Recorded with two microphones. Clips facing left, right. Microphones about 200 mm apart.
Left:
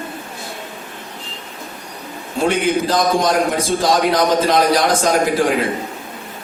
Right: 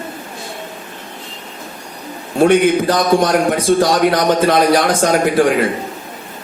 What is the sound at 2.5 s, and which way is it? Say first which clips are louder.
A man's voice: right 2 dB; 55° right (ahead or behind).